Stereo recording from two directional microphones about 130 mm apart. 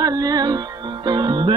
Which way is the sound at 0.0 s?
30° right (ahead or behind).